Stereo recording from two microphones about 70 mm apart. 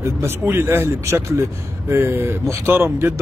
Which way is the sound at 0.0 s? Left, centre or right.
Right.